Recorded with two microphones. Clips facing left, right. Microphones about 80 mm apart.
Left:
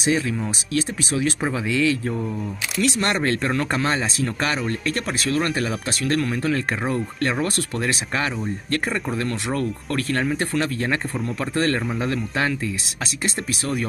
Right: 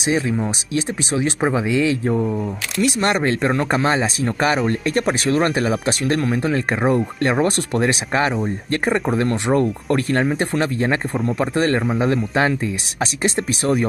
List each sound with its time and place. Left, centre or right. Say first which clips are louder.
0.1 s speech: right 3 dB; right
11.1 s speech: right 6 dB; centre
11.5 s speech: right 2 dB; centre
11.8 s speech: right 6 dB; centre
12.4 s speech: right 5 dB; right